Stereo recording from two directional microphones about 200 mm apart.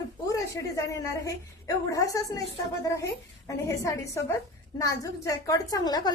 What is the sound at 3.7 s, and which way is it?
A woman's voice, 15° left (ahead or behind).